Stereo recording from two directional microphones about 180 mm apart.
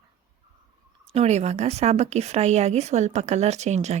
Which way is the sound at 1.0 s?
35° right (ahead or behind).